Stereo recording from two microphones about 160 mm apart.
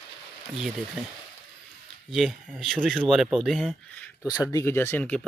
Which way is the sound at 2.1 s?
Centre (ahead or behind).